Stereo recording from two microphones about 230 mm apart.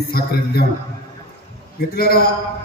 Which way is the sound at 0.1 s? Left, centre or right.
Left.